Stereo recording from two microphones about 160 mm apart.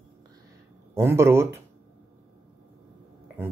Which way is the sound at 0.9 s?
15° right (ahead or behind).